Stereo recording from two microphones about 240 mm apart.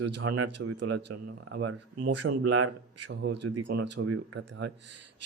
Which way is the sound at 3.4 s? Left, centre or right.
Right.